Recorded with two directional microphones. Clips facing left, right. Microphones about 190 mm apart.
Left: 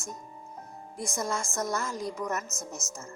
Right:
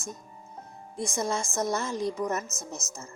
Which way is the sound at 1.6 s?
25° right (ahead or behind).